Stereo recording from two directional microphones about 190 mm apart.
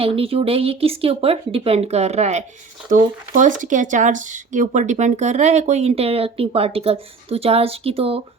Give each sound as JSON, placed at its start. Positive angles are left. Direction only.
{"t": 0.0, "sound": "speech", "side_deg": -30}